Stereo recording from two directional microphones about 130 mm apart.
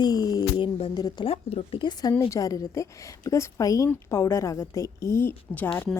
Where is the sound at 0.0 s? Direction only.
30° left (ahead or behind).